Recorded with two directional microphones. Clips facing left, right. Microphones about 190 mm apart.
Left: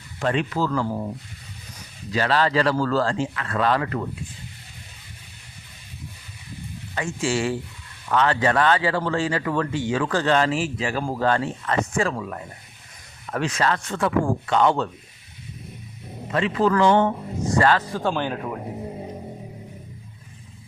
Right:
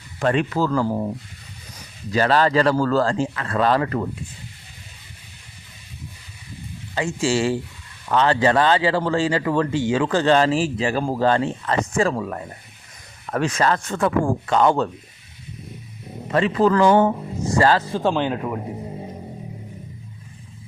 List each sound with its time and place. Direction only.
0.2 s speech: 50° right (ahead or behind)
2.1 s speech: 45° right (ahead or behind)
6.9 s speech: 30° right (ahead or behind)
16.3 s speech: 40° right (ahead or behind)
18.1 s speech: 15° right (ahead or behind)